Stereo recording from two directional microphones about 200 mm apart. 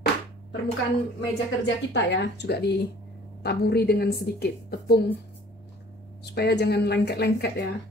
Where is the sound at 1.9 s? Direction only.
60° left (ahead or behind).